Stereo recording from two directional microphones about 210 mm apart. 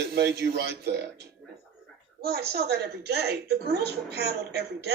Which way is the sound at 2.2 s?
50° right (ahead or behind).